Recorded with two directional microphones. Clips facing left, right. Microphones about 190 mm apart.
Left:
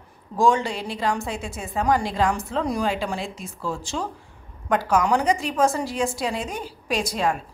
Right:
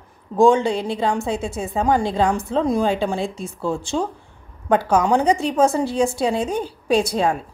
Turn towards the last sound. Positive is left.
turn(degrees=-30)  # may be behind; listen again after turning